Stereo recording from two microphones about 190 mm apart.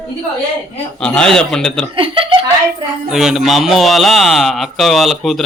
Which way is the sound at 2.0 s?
30° right (ahead or behind).